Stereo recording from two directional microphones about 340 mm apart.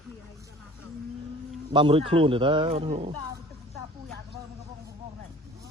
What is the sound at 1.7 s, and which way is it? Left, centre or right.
A man's voice, centre.